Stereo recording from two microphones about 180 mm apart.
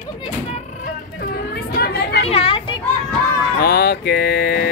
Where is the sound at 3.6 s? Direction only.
60° left (ahead or behind).